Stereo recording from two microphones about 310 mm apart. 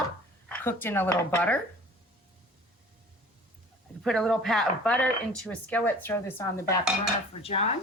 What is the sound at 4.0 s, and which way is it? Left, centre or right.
Speech, centre.